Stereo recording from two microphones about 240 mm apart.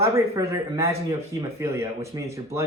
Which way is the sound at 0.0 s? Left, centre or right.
Centre.